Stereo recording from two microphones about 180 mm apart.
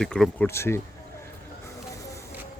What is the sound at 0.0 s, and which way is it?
Speech, 5° left (ahead or behind).